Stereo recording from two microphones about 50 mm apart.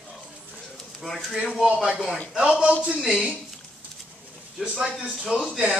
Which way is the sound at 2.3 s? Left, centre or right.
Centre.